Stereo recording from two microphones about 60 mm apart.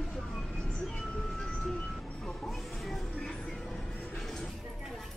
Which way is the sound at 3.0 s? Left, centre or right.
Centre.